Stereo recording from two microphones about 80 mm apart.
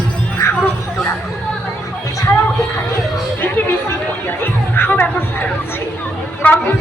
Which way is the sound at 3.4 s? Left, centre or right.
Left.